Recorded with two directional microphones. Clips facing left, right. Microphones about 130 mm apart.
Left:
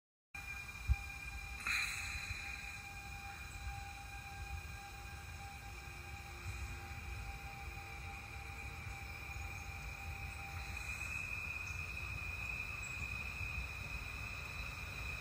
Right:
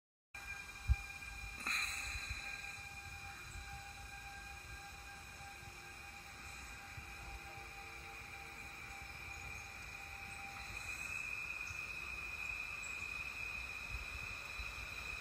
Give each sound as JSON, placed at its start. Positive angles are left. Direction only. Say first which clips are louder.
{"t": 1.6, "sound": "vehicle", "louder": "right 1 dB", "side_deg": -20}